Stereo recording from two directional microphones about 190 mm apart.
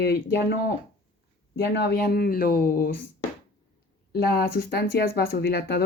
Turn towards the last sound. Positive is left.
turn(degrees=60)  # may be behind; listen again after turning